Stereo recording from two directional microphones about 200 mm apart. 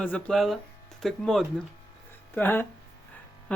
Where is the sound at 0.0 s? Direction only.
5° left (ahead or behind).